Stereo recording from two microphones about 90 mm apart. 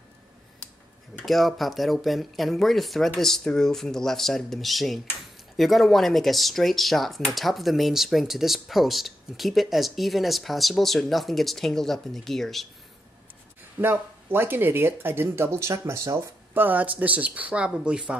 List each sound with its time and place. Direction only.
1.2 s speech: centre (ahead or behind)
13.7 s speech: 25° right (ahead or behind)
16.5 s speech: 20° right (ahead or behind)